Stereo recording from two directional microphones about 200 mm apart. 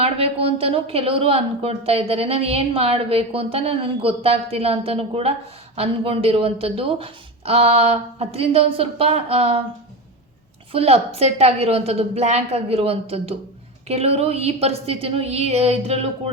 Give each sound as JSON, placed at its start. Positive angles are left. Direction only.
{"t": 0.0, "sound": "a woman's voice", "side_deg": -30}
{"t": 10.7, "sound": "a woman's voice", "side_deg": -30}